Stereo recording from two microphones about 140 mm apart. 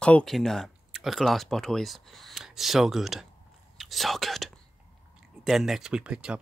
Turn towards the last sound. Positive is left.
turn(degrees=-5)  # may be behind; listen again after turning